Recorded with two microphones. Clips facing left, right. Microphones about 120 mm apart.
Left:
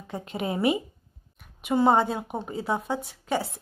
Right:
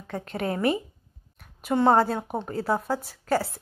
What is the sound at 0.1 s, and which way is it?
A woman's voice, 5° left (ahead or behind).